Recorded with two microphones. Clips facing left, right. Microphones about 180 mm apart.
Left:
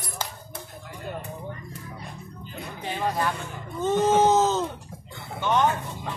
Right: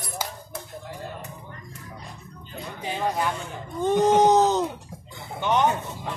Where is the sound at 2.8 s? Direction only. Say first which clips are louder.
Right 1 dB; 15° right (ahead or behind).